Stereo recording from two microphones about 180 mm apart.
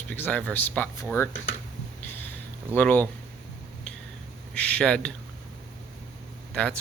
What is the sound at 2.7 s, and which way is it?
Speech, 10° left (ahead or behind).